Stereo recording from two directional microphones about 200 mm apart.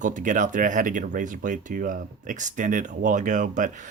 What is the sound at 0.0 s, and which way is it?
Speech, 40° right (ahead or behind).